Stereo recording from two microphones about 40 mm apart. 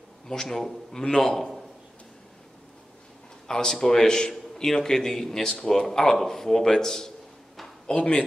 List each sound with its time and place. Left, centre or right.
0.3 s speech: centre
3.4 s a man's voice: centre